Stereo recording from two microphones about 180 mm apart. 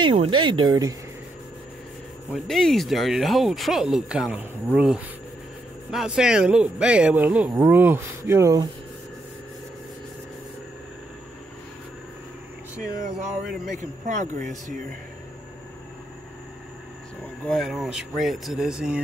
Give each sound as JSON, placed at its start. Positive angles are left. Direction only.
{"t": 0.0, "sound": "speech", "side_deg": -30}
{"t": 2.3, "sound": "speech", "side_deg": 0}
{"t": 12.8, "sound": "speech", "side_deg": 0}
{"t": 13.7, "sound": "speech", "side_deg": -40}
{"t": 17.5, "sound": "speech", "side_deg": 0}